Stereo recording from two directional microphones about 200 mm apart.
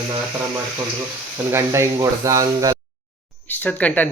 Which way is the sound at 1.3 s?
15° right (ahead or behind).